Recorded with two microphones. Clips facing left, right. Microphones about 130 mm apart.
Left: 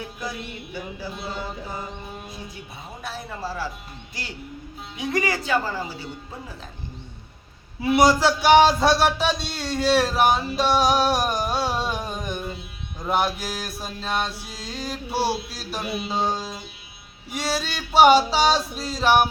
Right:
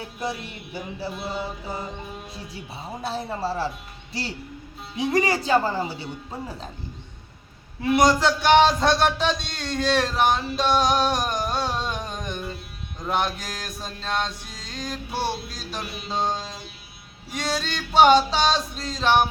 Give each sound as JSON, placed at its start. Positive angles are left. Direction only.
{"t": 0.0, "sound": "music", "side_deg": -30}
{"t": 1.1, "sound": "mantra", "side_deg": -5}
{"t": 2.8, "sound": "speech", "side_deg": -35}
{"t": 7.8, "sound": "speech", "side_deg": 5}